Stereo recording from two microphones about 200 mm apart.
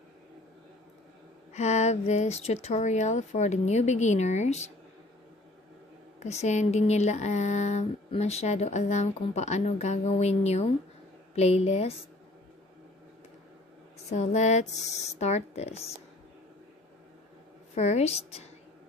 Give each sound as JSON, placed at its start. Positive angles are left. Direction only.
{"t": 1.5, "sound": "speech", "side_deg": 35}
{"t": 6.1, "sound": "speech", "side_deg": 35}
{"t": 14.1, "sound": "speech", "side_deg": 35}
{"t": 17.7, "sound": "speech", "side_deg": 35}